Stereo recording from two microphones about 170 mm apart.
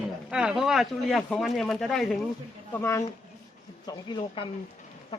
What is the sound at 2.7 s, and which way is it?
Speech, 15° left (ahead or behind).